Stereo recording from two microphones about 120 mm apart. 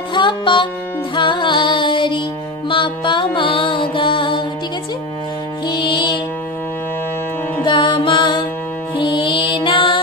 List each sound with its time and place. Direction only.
0.1 s music: 40° left (ahead or behind)
5.7 s music: 40° left (ahead or behind)
7.6 s music: 45° left (ahead or behind)